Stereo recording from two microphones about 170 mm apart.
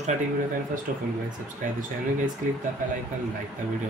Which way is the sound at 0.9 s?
55° right (ahead or behind).